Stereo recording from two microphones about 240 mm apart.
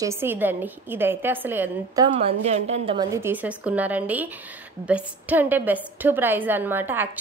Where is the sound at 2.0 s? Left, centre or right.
Right.